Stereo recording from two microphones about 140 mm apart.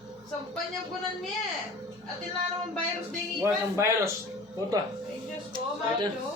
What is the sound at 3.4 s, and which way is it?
Speech, 20° right (ahead or behind).